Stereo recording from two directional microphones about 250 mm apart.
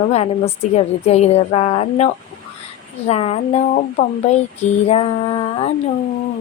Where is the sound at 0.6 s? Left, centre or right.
Left.